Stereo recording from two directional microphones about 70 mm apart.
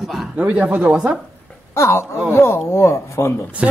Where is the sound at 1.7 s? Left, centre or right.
Left.